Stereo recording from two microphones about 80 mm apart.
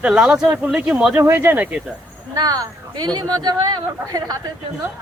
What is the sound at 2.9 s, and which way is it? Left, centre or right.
Speech, right.